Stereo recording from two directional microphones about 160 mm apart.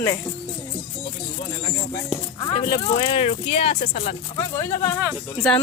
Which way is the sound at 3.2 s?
40° left (ahead or behind).